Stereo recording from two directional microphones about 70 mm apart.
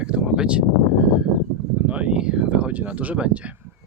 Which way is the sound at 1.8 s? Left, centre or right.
Centre.